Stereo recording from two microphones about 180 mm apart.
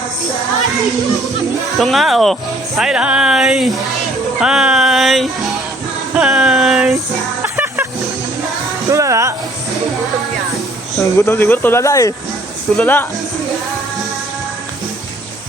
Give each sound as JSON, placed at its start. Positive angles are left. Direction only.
{"t": 1.8, "sound": "speech", "side_deg": 0}
{"t": 7.4, "sound": "music", "side_deg": -15}
{"t": 8.9, "sound": "a sound", "side_deg": -15}
{"t": 11.0, "sound": "speech", "side_deg": 15}